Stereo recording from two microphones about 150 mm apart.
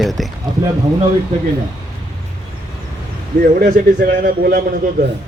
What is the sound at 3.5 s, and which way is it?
A man's voice, 80° right.